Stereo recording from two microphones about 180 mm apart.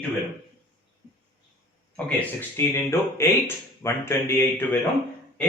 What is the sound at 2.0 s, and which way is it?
Speech, 10° left (ahead or behind).